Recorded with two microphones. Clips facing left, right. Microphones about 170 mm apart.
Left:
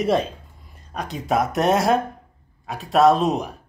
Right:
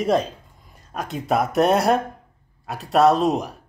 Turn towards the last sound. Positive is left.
turn(degrees=0)  # may be behind; listen again after turning